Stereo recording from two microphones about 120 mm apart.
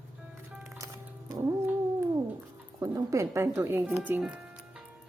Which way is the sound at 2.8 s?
25° right (ahead or behind).